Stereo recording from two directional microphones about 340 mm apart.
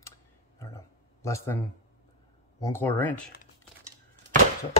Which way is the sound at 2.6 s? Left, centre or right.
Centre.